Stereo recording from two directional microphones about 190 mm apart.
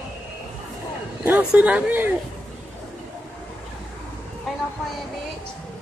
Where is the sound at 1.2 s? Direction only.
5° right (ahead or behind).